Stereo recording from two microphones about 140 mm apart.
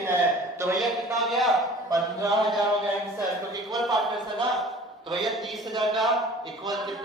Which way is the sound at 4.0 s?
Centre (ahead or behind).